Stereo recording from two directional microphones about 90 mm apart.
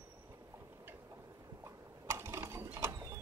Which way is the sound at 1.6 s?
30° right (ahead or behind).